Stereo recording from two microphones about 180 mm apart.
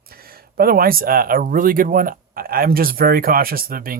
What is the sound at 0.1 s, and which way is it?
Speech, 55° right (ahead or behind).